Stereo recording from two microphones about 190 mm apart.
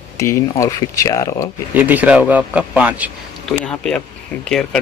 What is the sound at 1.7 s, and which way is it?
A man's voice, 10° right (ahead or behind).